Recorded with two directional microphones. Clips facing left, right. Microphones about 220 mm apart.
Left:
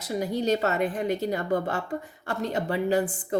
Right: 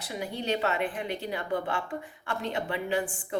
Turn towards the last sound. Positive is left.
turn(degrees=40)  # may be behind; listen again after turning